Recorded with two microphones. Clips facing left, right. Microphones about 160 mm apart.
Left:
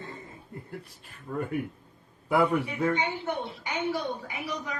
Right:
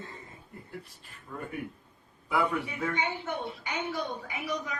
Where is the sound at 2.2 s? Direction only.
45° left (ahead or behind).